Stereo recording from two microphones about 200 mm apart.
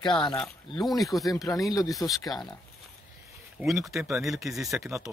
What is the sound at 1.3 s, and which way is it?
Speech, 15° left (ahead or behind).